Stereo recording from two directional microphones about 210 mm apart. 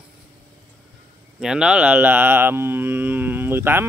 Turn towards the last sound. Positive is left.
turn(degrees=-10)  # may be behind; listen again after turning